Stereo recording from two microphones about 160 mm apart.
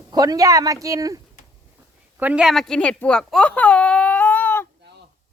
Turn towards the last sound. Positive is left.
turn(degrees=10)  # may be behind; listen again after turning